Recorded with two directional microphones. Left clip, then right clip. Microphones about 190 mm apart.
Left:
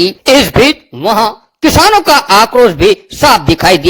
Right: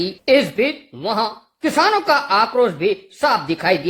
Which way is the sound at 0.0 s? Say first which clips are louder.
Left 8 dB; 35° left (ahead or behind).